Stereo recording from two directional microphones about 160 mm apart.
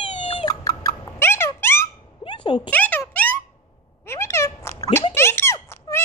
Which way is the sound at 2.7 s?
10° left (ahead or behind).